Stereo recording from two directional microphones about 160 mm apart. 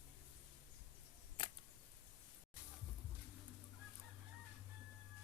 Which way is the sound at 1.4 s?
30° left (ahead or behind).